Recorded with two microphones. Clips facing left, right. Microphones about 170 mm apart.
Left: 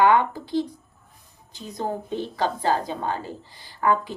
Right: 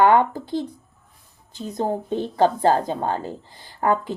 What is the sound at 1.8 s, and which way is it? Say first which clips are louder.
A child's voice: right 4 dB; 50° right (ahead or behind).